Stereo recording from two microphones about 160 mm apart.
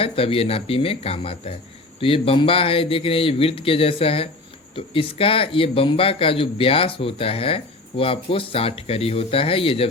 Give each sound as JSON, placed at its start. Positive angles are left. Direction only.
{"t": 0.0, "sound": "speech", "side_deg": 35}